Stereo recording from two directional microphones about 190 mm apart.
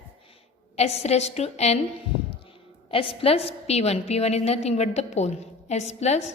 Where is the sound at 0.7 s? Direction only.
35° left (ahead or behind).